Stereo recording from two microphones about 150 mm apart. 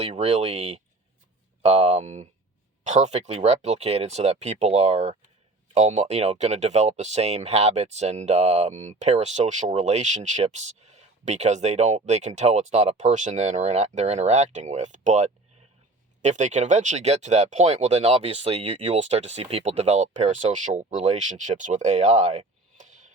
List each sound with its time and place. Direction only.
0.0 s speech: 45° right (ahead or behind)